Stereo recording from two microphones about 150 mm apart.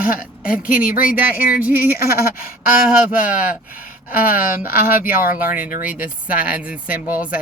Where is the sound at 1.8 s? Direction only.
85° left.